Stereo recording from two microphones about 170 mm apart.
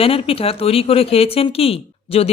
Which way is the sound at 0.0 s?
35° left (ahead or behind).